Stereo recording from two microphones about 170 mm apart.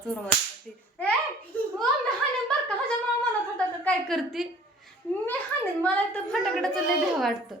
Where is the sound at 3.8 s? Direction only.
Centre (ahead or behind).